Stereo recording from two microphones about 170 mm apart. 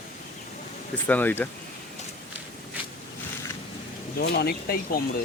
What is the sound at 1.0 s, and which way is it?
Speech, 10° left (ahead or behind).